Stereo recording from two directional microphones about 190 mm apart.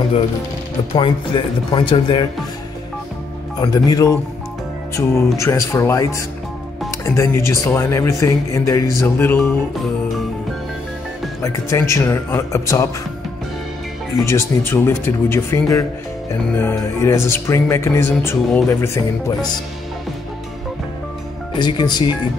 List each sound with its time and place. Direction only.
0.9 s speech: 25° left (ahead or behind)
3.6 s speech: 20° left (ahead or behind)
4.9 s music: 15° left (ahead or behind)
11.4 s music: 15° left (ahead or behind)
14.2 s music: 15° left (ahead or behind)
21.5 s speech: 25° left (ahead or behind)